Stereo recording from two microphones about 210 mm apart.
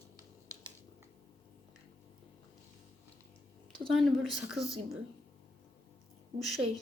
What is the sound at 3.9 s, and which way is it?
Speech, centre (ahead or behind).